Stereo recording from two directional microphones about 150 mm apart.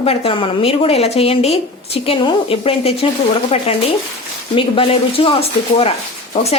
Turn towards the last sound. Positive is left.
turn(degrees=45)  # may be behind; listen again after turning